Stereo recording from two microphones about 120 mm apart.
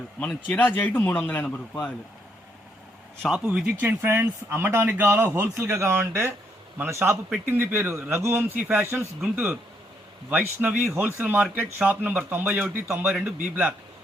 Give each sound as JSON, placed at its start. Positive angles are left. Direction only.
{"t": 0.2, "sound": "speech", "side_deg": 10}
{"t": 3.2, "sound": "speech", "side_deg": -5}
{"t": 3.8, "sound": "speech", "side_deg": -20}